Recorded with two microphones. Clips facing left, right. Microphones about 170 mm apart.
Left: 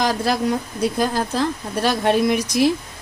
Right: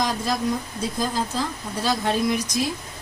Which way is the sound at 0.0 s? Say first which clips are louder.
Left 4 dB; 70° left (ahead or behind).